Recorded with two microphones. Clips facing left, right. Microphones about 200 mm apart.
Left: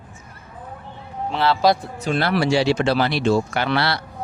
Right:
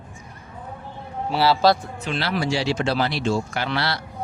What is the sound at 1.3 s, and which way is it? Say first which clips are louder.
Speech: right 1 dB; 5° right (ahead or behind).